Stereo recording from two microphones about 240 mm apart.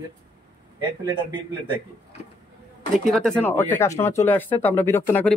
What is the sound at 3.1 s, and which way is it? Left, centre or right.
Speech, centre.